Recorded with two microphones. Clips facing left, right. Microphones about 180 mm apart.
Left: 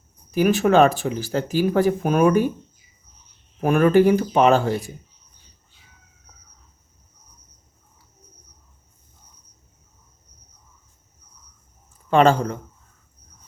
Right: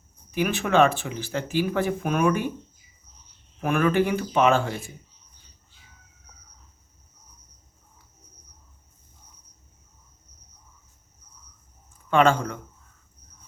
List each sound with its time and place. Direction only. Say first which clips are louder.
0.3 s speech: left 7 dB; 40° left (ahead or behind)
3.6 s speech: left 6 dB; 40° left (ahead or behind)
12.1 s speech: left 4 dB; 35° left (ahead or behind)